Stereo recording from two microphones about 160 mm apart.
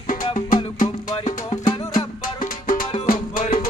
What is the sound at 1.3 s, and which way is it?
Music, 50° left (ahead or behind).